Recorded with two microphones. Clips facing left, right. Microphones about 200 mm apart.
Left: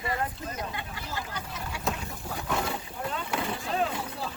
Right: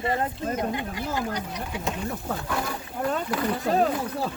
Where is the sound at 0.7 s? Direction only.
15° right (ahead or behind).